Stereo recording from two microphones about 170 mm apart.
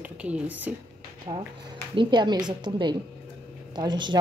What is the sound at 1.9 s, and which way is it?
A woman's voice, 30° right (ahead or behind).